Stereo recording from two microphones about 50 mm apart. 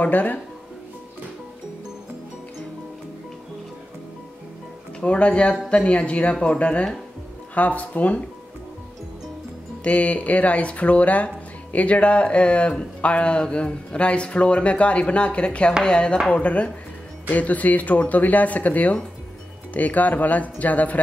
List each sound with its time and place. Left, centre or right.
0.0 s speech: left
5.0 s speech: left
9.8 s speech: left